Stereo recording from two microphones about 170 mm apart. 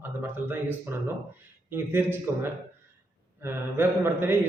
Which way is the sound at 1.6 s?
15° right (ahead or behind).